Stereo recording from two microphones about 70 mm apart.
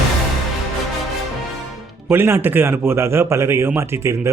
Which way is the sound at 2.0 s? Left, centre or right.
Right.